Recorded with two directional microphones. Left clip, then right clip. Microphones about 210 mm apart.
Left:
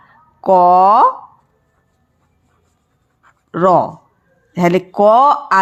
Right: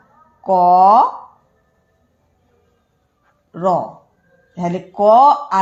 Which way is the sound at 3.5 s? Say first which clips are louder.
Left 6 dB; 40° left (ahead or behind).